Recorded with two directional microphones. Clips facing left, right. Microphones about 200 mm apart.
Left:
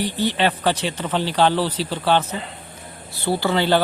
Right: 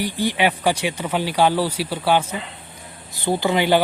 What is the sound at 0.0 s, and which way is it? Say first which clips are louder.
Speech: even; 10° right (ahead or behind).